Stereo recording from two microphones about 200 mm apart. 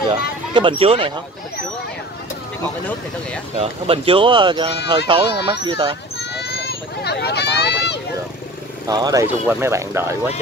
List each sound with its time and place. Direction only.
0.5 s speech: 25° right (ahead or behind)
3.5 s speech: 30° right (ahead or behind)
6.1 s a sound: 60° left (ahead or behind)
8.8 s speech: 20° right (ahead or behind)